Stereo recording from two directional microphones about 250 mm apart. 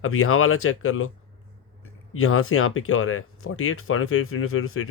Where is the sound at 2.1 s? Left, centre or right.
Left.